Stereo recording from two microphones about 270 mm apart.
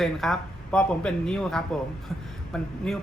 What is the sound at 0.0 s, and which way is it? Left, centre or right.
Speech, centre.